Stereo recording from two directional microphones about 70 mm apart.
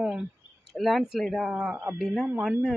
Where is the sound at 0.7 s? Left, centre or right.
Centre.